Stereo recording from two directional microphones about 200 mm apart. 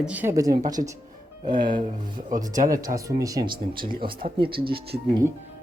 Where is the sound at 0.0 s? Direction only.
5° right (ahead or behind).